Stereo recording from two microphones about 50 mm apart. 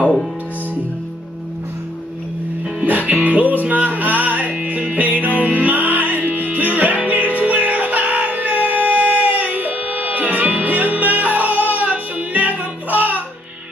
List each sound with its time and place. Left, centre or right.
3.3 s music: right